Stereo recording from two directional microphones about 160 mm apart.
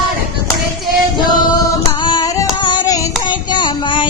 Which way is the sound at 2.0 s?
25° left (ahead or behind).